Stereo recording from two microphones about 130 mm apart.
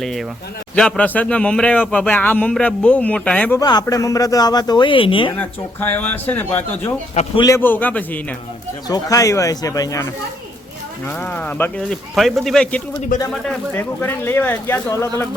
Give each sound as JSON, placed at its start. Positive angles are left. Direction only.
{"t": 0.0, "sound": "a man's voice", "side_deg": 0}
{"t": 3.6, "sound": "a man's voice", "side_deg": 30}
{"t": 5.4, "sound": "a man's voice", "side_deg": 15}
{"t": 8.9, "sound": "speech", "side_deg": 25}
{"t": 11.2, "sound": "a man's voice", "side_deg": 10}
{"t": 12.1, "sound": "speech", "side_deg": 0}
{"t": 13.1, "sound": "speech", "side_deg": 90}
{"t": 13.7, "sound": "a man's voice", "side_deg": 15}